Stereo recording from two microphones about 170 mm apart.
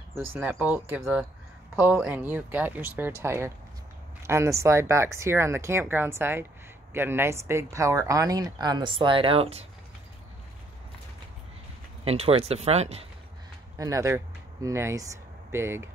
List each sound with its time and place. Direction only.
0.2 s speech: 10° right (ahead or behind); by 9.7 s 35° right (ahead or behind)
12.0 s speech: 35° right (ahead or behind)
13.7 s speech: 20° right (ahead or behind)